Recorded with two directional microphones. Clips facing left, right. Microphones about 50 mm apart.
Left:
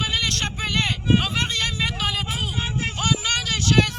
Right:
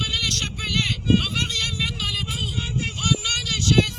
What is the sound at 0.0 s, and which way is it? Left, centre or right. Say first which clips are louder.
Vehicle: left 2 dB; left.